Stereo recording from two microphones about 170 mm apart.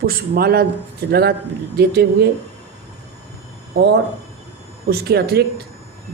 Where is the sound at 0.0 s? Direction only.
60° right (ahead or behind).